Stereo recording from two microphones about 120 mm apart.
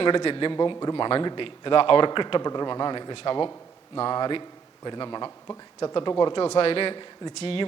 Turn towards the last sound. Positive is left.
turn(degrees=50)  # may be behind; listen again after turning